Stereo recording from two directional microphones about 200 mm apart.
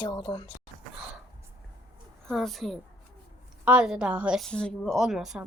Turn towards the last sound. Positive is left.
turn(degrees=0)  # may be behind; listen again after turning